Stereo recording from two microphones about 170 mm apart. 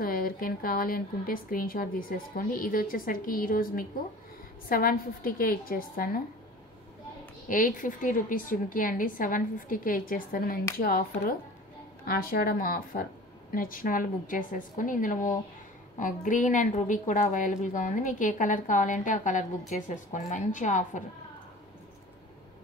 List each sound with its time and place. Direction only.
0.0 s speech: 60° left (ahead or behind)
7.4 s a woman's voice: 50° left (ahead or behind)